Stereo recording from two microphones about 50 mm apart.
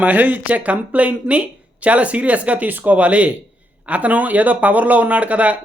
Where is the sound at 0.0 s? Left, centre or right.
Right.